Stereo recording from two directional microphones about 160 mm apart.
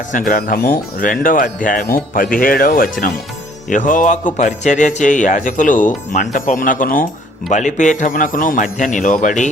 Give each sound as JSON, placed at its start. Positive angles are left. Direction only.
{"t": 0.1, "sound": "a man's voice", "side_deg": 60}
{"t": 7.5, "sound": "a man's voice", "side_deg": 50}